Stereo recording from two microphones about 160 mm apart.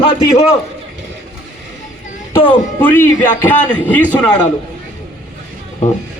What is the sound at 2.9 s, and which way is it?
Speech, 10° left (ahead or behind).